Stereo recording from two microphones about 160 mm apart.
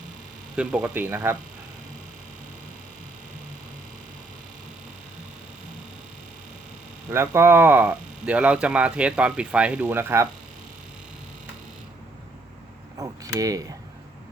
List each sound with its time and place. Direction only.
0.5 s speech: 5° right (ahead or behind)
7.1 s speech: 15° right (ahead or behind)
13.0 s a sound: 20° right (ahead or behind)